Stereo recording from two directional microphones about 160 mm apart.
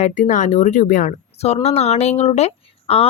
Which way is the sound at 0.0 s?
50° left (ahead or behind).